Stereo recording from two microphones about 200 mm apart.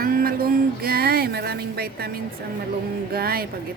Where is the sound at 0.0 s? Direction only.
45° right (ahead or behind).